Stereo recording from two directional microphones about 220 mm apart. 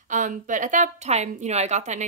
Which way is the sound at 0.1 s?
35° right (ahead or behind).